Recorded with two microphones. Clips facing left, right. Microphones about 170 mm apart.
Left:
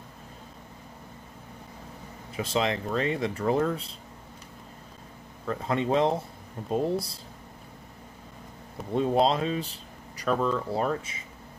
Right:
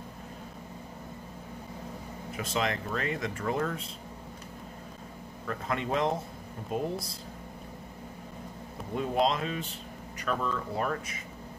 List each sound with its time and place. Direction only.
2.3 s speech: 30° left (ahead or behind)
5.5 s speech: 30° left (ahead or behind)
8.9 s speech: 30° left (ahead or behind)